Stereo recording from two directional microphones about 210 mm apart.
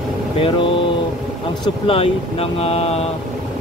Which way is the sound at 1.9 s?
25° left (ahead or behind).